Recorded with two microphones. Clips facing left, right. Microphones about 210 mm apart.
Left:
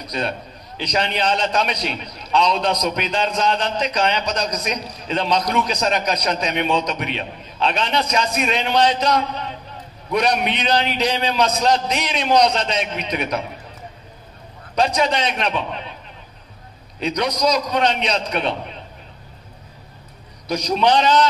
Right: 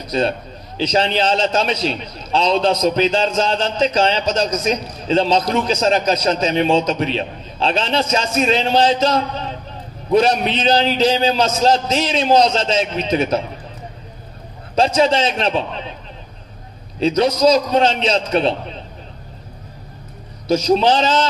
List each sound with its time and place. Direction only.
0.0 s a man's voice: 30° right (ahead or behind)
14.8 s a man's voice: 30° right (ahead or behind)
17.0 s a man's voice: 25° right (ahead or behind)
20.4 s a man's voice: 25° right (ahead or behind)